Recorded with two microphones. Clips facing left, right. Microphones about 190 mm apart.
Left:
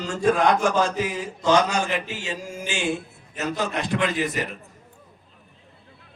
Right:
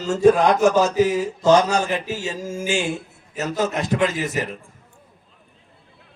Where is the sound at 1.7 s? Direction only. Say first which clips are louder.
Right 4 dB; 40° right (ahead or behind).